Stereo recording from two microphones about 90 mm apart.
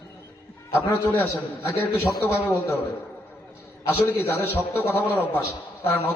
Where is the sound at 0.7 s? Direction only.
25° left (ahead or behind).